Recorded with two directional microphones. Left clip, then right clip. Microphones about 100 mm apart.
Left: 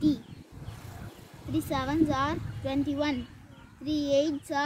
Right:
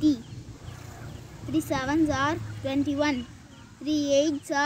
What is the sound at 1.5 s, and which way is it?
Speech, centre (ahead or behind).